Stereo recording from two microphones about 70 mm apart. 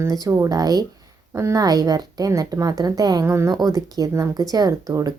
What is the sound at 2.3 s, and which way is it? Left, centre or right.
Speech, right.